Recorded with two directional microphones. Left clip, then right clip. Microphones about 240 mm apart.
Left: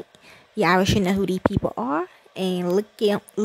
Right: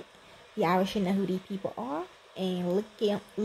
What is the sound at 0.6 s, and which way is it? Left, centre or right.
Speech, left.